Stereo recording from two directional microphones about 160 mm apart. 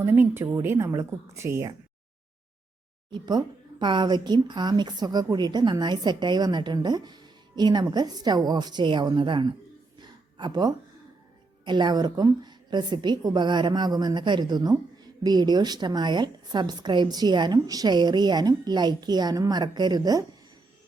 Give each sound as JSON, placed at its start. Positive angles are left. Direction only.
{"t": 0.0, "sound": "a woman's voice", "side_deg": -15}
{"t": 3.1, "sound": "speech", "side_deg": -25}
{"t": 10.0, "sound": "a sound", "side_deg": -25}
{"t": 11.6, "sound": "speech", "side_deg": -30}